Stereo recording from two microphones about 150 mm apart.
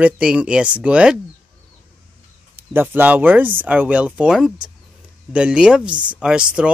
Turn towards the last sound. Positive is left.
turn(degrees=-5)  # may be behind; listen again after turning